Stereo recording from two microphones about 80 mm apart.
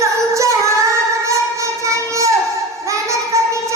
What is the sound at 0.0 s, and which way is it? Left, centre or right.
Singing, right.